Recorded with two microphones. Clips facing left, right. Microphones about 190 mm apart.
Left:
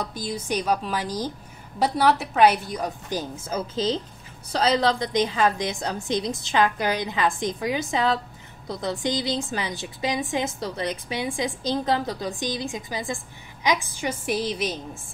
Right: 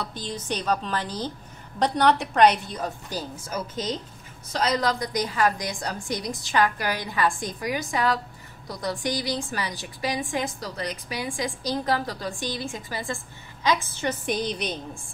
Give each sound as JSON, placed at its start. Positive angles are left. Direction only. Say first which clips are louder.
{"t": 0.0, "sound": "a woman's voice", "louder": "left 3 dB", "side_deg": 10}